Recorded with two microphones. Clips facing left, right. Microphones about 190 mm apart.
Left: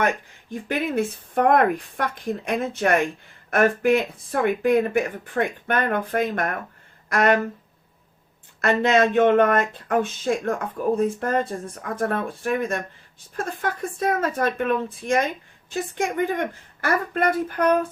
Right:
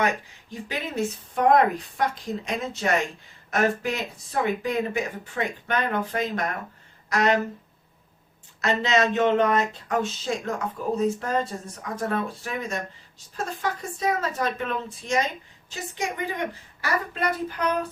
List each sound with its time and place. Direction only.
0.5 s speech: 55° left (ahead or behind)
8.6 s speech: 55° left (ahead or behind)